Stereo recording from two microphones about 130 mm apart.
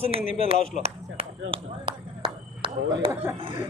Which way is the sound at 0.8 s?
50° right (ahead or behind).